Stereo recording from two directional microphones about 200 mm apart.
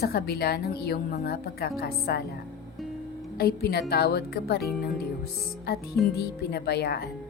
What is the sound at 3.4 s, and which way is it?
Speech, 50° left (ahead or behind).